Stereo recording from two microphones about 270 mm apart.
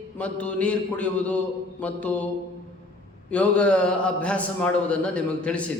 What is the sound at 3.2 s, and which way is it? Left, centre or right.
A man's voice, centre.